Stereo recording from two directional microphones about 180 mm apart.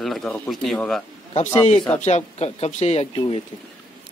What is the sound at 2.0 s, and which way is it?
Speech, 40° left (ahead or behind).